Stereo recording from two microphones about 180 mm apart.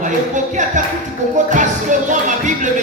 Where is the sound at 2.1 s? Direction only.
45° right (ahead or behind).